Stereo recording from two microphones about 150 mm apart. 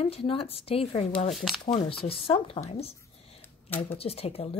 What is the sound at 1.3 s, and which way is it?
Speech, centre (ahead or behind).